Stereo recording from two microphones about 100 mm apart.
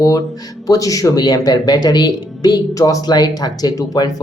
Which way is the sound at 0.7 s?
35° left (ahead or behind).